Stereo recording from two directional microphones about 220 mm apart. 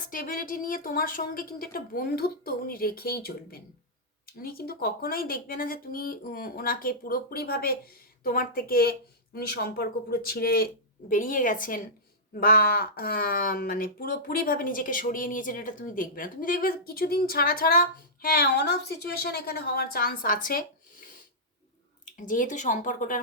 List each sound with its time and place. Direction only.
0.1 s speech: 40° left (ahead or behind)
22.3 s speech: 35° left (ahead or behind)